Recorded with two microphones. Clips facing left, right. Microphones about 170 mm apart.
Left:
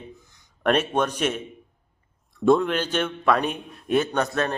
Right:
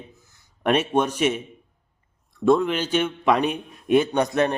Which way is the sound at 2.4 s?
Centre (ahead or behind).